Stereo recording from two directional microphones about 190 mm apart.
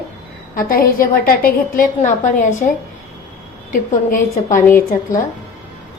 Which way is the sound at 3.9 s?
45° left (ahead or behind).